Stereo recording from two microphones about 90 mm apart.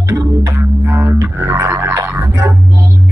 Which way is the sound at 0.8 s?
25° right (ahead or behind).